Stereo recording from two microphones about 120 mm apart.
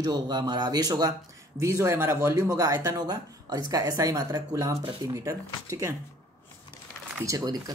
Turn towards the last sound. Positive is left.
turn(degrees=-30)  # may be behind; listen again after turning